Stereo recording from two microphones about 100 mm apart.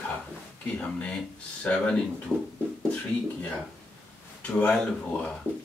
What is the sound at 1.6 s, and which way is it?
Speech, 10° left (ahead or behind).